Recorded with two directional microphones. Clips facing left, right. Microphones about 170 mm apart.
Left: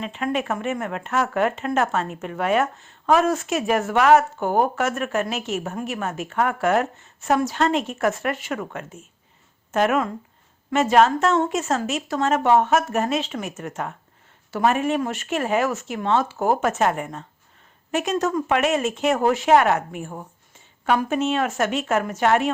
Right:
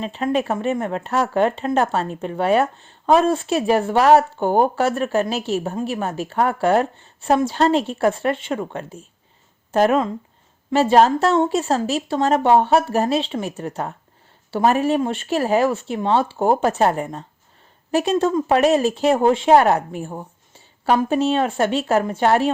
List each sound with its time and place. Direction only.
0.0 s speech: 30° right (ahead or behind)